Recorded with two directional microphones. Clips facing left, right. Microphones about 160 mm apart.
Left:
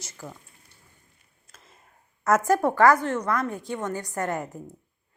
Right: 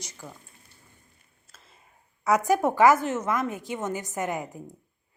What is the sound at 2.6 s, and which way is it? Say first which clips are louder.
Speech: even; 20° right (ahead or behind).